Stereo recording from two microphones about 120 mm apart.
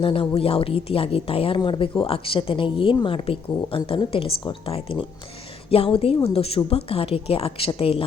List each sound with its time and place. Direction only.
0.0 s a woman's voice: 45° left (ahead or behind)